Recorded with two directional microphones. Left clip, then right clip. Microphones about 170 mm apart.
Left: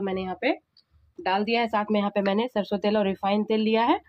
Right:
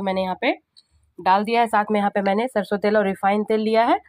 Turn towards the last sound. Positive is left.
turn(degrees=-15)  # may be behind; listen again after turning